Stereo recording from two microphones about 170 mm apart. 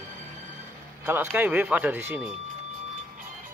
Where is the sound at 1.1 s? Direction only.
10° right (ahead or behind).